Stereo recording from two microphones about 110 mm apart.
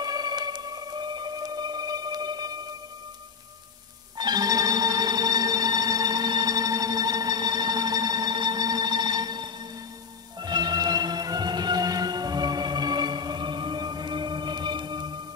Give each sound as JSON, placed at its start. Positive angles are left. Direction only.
{"t": 0.0, "sound": "music", "side_deg": -40}
{"t": 4.2, "sound": "music", "side_deg": -40}